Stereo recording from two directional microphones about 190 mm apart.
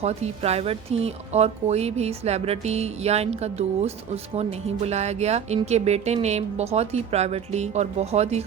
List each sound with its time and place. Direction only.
0.0 s speech: 35° right (ahead or behind)